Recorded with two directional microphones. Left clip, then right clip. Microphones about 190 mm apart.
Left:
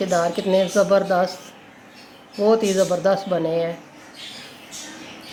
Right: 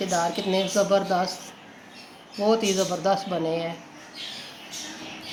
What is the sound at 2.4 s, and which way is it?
Speech, 35° left (ahead or behind).